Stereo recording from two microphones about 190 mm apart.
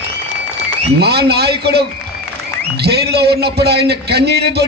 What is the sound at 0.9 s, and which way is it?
A man's voice, 60° right (ahead or behind).